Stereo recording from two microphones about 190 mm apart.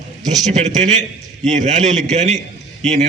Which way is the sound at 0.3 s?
40° right (ahead or behind).